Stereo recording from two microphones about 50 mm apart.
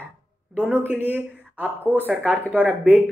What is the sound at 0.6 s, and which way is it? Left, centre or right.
Speech, right.